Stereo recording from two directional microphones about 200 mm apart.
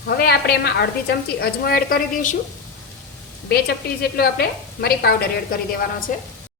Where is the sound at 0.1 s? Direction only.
50° left (ahead or behind).